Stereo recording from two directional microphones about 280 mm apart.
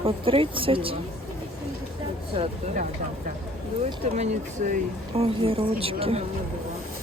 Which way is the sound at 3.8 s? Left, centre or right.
Right.